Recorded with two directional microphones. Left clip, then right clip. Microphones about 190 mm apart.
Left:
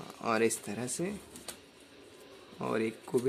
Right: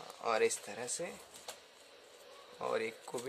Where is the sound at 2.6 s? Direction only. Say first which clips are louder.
Left 3 dB; 15° left (ahead or behind).